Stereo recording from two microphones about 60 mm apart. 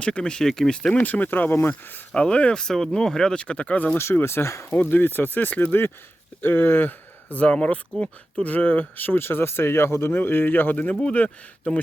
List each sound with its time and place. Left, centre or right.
0.0 s speech: centre
1.0 s speech: left
2.1 s speech: centre
4.1 s speech: left
4.7 s speech: left